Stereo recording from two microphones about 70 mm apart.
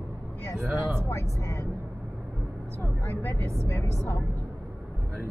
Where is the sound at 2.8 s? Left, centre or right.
Left.